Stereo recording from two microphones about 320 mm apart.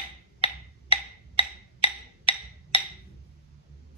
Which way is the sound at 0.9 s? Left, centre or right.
Centre.